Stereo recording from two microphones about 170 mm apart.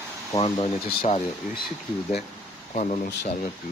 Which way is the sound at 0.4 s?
35° left (ahead or behind).